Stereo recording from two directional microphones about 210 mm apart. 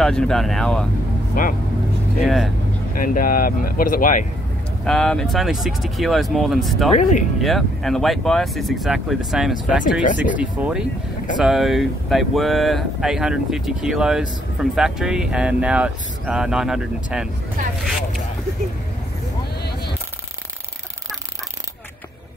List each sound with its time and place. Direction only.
0.0 s speech: 5° left (ahead or behind)
1.4 s speech: 40° left (ahead or behind)
2.2 s speech: centre (ahead or behind)
3.0 s speech: 40° left (ahead or behind)
4.8 s speech: 5° left (ahead or behind)
7.0 s speech: 35° left (ahead or behind)
7.4 s speech: centre (ahead or behind)